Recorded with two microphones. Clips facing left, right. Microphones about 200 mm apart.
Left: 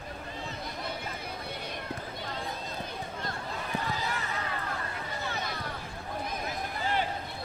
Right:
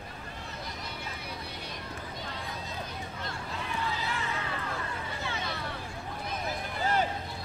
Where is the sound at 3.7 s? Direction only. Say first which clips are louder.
Left 1 dB; 40° left (ahead or behind).